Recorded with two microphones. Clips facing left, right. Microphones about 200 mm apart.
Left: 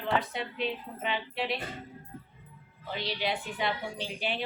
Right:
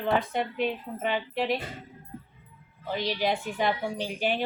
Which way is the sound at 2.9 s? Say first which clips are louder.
Right 5 dB; 45° right (ahead or behind).